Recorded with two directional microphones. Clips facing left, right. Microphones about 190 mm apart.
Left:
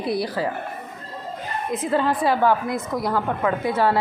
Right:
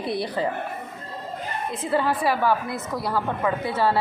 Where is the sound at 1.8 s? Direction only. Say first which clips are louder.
Left 2 dB; 20° left (ahead or behind).